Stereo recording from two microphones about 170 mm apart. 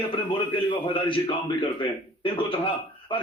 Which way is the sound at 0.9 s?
30° left (ahead or behind).